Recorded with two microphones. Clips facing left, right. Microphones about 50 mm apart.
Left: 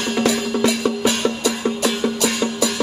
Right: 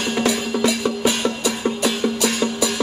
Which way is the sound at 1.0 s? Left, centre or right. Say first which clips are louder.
Left 1 dB; centre.